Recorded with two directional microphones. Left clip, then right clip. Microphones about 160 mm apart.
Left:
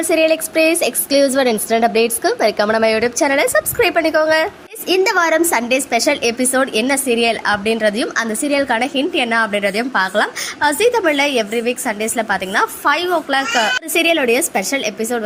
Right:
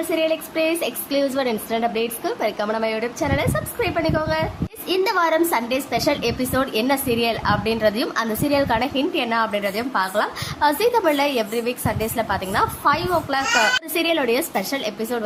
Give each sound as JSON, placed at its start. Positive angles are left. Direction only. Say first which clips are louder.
{"t": 0.1, "sound": "a woman's voice", "louder": "left 8 dB", "side_deg": 30}